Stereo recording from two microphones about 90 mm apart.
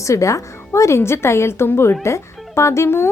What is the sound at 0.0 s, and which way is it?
A woman's voice, 35° left (ahead or behind).